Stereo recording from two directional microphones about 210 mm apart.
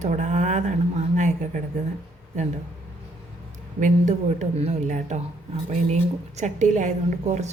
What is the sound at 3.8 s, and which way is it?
A woman's voice, 35° right (ahead or behind).